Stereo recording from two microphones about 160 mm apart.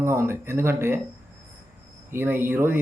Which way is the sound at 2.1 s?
15° right (ahead or behind).